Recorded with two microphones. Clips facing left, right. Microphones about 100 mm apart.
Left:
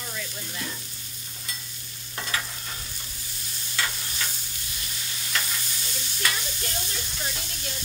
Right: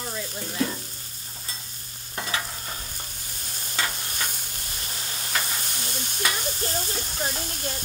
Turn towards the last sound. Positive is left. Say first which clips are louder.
# right 5 dB
turn(degrees=-45)  # may be behind; listen again after turning